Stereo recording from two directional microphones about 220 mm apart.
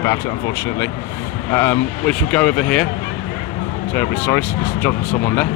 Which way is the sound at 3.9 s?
10° left (ahead or behind).